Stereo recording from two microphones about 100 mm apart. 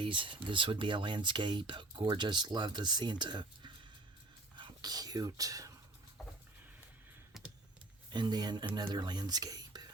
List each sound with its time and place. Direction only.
0.0 s speech: 60° right (ahead or behind)
4.5 s whispering: 45° right (ahead or behind)
7.3 s computer keyboard: 5° right (ahead or behind)
8.1 s speech: 45° right (ahead or behind)